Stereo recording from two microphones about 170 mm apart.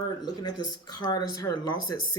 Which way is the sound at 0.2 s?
25° left (ahead or behind).